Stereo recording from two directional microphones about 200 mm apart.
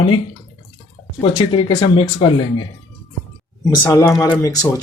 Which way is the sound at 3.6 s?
15° left (ahead or behind).